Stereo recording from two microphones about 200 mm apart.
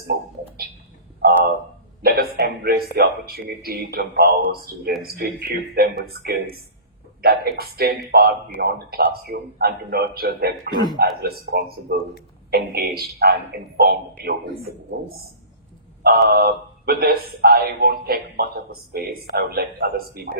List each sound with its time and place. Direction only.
1.2 s a sound: 50° right (ahead or behind)
2.0 s a man's voice: 50° right (ahead or behind)
10.7 s a man's voice: 20° left (ahead or behind)
11.2 s a man's voice: 50° right (ahead or behind)
16.0 s a man's voice: 50° right (ahead or behind)